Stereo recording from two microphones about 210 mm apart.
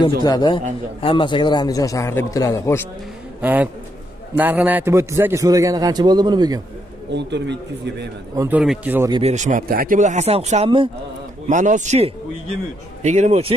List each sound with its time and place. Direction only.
0.2 s a man's voice: 20° left (ahead or behind)
3.3 s a man's voice: 5° right (ahead or behind)
7.1 s speech: 55° right (ahead or behind)
8.4 s a man's voice: 5° right (ahead or behind)
9.1 s speech: 30° right (ahead or behind)